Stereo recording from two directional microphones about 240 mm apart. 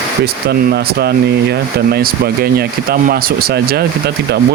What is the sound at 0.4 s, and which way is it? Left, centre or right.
Speech, right.